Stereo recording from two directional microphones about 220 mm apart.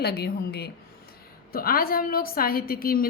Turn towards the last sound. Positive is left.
turn(degrees=40)  # may be behind; listen again after turning